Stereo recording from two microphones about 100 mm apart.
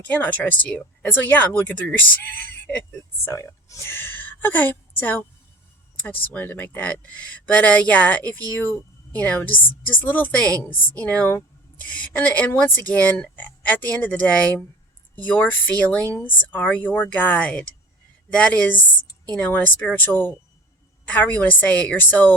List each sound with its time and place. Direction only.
0.1 s a woman's voice: 15° left (ahead or behind)
6.2 s speech: 20° left (ahead or behind)